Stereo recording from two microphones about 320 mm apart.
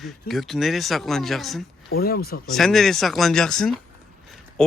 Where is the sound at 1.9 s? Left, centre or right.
Left.